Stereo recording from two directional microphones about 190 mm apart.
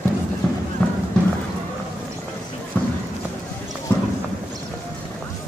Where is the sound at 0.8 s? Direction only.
5° left (ahead or behind).